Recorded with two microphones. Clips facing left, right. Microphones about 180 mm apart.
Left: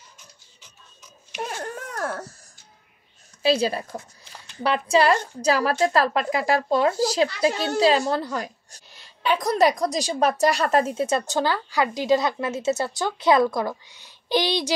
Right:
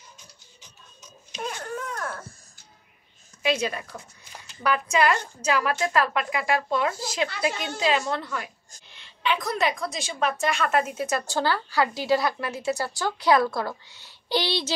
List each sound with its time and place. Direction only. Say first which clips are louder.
2.0 s music: left 5 dB; 75° left (ahead or behind)
3.4 s a woman's voice: left 5 dB; 30° left (ahead or behind); by 14.7 s 15° left (ahead or behind)